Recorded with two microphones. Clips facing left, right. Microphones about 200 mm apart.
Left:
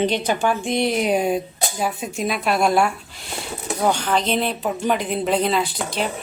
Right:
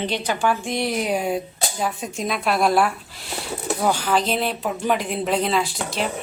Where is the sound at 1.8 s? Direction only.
5° left (ahead or behind).